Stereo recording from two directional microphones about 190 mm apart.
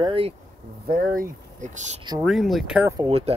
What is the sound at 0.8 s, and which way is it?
Speech, 50° right (ahead or behind).